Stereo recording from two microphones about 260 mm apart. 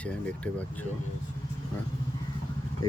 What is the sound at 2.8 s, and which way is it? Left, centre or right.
Speech, centre.